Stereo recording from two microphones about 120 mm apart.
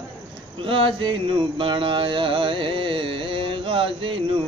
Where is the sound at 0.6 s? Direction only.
45° right (ahead or behind).